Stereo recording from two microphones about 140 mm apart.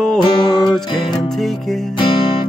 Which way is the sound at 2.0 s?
35° left (ahead or behind).